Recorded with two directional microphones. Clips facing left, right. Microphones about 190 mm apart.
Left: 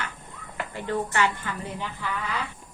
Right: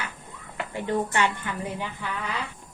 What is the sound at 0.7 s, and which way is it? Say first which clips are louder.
A woman's voice: right 1 dB; 15° right (ahead or behind).